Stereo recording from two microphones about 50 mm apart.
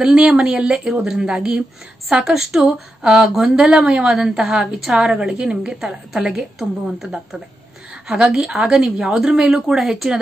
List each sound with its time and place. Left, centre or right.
0.0 s a woman's voice: centre
8.1 s a woman's voice: centre